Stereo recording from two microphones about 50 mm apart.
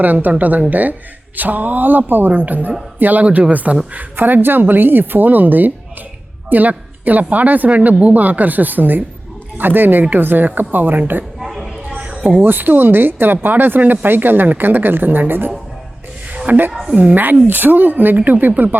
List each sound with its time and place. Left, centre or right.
0.0 s a woman's voice: right
3.2 s speech: right
3.5 s a woman's voice: right
7.8 s a woman's voice: right
11.3 s a sound: centre
11.9 s a sound: right
12.4 s a woman's voice: right